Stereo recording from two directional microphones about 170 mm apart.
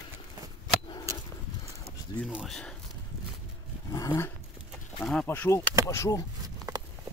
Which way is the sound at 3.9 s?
20° left (ahead or behind).